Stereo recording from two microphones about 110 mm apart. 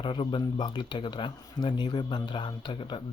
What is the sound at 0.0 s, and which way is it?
Speech, 45° left (ahead or behind).